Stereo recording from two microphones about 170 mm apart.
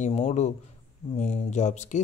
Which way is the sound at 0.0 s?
40° left (ahead or behind).